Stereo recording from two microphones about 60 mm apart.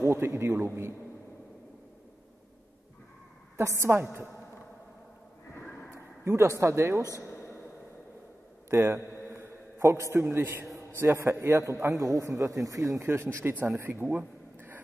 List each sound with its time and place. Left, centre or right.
0.0 s a man's voice: right
3.6 s speech: right
5.9 s speech: right
7.2 s a sound: left
8.6 s a sound: right
10.3 s a man's voice: right
12.0 s speech: right
13.0 s speech: right
13.8 s a sound: right